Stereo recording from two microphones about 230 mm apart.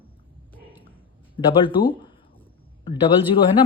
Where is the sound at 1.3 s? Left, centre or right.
Left.